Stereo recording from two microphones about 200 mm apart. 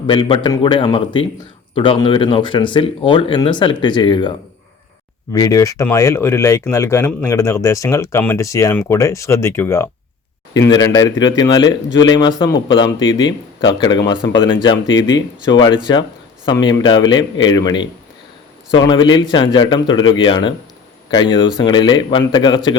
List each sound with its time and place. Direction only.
0.1 s speech: 25° left (ahead or behind)
5.3 s speech: 15° left (ahead or behind)
13.0 s speech: 70° left (ahead or behind)
13.6 s speech: 25° left (ahead or behind)
14.8 s speech: 70° left (ahead or behind)
15.5 s speech: 20° left (ahead or behind)